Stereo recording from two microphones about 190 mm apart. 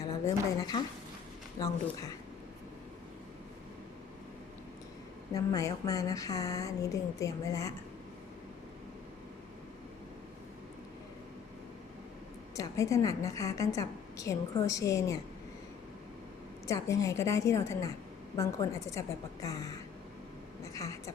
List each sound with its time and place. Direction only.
0.0 s speech: 20° left (ahead or behind)
5.3 s a woman's voice: 20° left (ahead or behind)
12.5 s a woman's voice: 15° left (ahead or behind)
16.6 s a woman's voice: 15° left (ahead or behind)
20.7 s a woman's voice: 15° left (ahead or behind)